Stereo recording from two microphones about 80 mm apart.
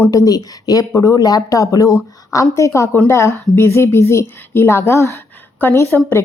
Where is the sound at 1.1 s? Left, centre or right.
Left.